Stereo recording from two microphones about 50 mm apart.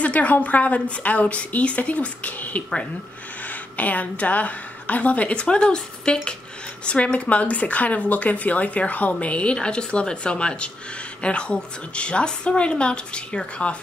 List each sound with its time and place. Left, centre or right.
0.0 s a woman's voice: left